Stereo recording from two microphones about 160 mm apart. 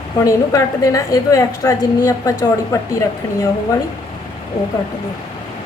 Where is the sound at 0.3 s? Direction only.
20° left (ahead or behind).